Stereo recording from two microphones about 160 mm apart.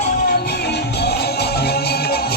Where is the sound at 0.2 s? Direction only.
75° left (ahead or behind).